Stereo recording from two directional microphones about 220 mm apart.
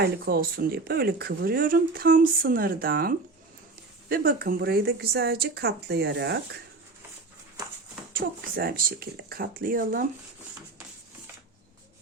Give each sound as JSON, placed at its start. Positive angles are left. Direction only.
{"t": 0.0, "sound": "speech", "side_deg": -45}
{"t": 8.1, "sound": "speech", "side_deg": -40}